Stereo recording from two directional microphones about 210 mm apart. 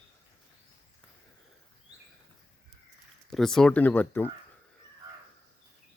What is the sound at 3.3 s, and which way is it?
Speech, centre (ahead or behind).